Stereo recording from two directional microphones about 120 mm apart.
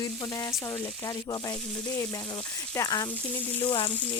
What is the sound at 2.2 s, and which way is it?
Frying, 50° left (ahead or behind).